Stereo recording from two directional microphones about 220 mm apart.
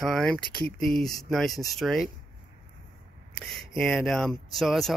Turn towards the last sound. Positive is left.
turn(degrees=0)  # may be behind; listen again after turning